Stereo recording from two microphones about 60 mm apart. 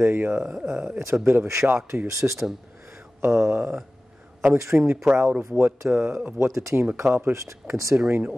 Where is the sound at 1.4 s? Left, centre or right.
Right.